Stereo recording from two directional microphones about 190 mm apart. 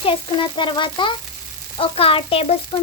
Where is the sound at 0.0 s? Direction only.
25° left (ahead or behind).